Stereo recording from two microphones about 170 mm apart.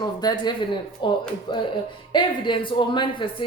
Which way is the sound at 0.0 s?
25° left (ahead or behind).